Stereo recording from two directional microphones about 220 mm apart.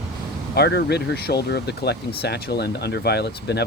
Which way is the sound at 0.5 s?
50° left (ahead or behind).